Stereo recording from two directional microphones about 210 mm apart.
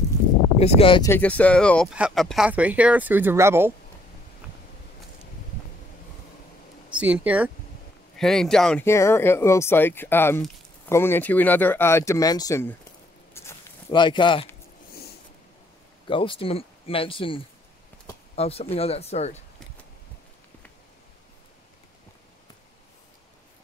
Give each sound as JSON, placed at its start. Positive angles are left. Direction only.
{"t": 0.6, "sound": "speech", "side_deg": 30}
{"t": 1.0, "sound": "speech", "side_deg": 10}
{"t": 6.9, "sound": "speech", "side_deg": -5}
{"t": 13.3, "sound": "a sound", "side_deg": 10}
{"t": 16.1, "sound": "speech", "side_deg": 25}